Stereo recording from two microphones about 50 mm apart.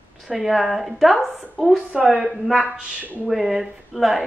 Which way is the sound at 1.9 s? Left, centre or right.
Right.